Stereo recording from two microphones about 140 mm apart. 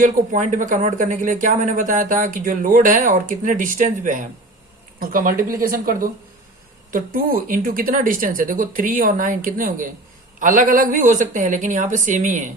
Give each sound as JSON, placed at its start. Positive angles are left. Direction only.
{"t": 0.0, "sound": "speech", "side_deg": -65}
{"t": 4.9, "sound": "speech", "side_deg": -90}